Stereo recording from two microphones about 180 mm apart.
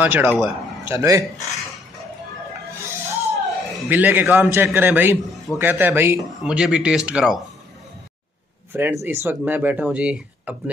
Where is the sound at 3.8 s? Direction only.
10° right (ahead or behind).